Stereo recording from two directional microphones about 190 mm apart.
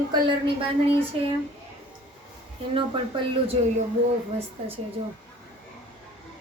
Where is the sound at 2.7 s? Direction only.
25° right (ahead or behind).